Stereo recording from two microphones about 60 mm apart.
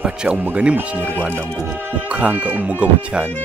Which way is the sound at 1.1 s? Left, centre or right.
Right.